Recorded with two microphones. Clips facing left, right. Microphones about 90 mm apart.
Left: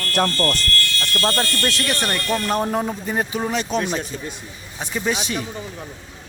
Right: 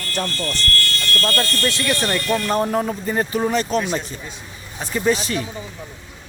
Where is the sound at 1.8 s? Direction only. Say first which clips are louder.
Right 2 dB; 20° left (ahead or behind).